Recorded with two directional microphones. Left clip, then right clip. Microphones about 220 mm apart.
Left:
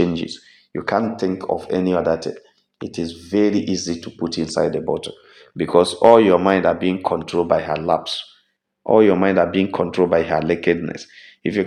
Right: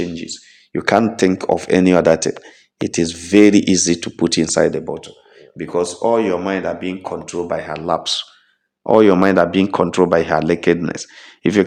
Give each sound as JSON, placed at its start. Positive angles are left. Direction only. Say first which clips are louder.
{"t": 0.0, "sound": "a sound", "louder": "left 4 dB", "side_deg": 5}
{"t": 0.7, "sound": "speech", "louder": "right 5 dB", "side_deg": -40}
{"t": 5.5, "sound": "speech", "louder": "left 4 dB", "side_deg": 20}
{"t": 7.9, "sound": "speech", "louder": "right 1 dB", "side_deg": -20}